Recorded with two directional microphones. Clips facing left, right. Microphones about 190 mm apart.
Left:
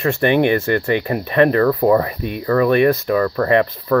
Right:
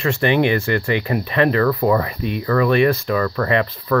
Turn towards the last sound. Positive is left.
turn(degrees=40)  # may be behind; listen again after turning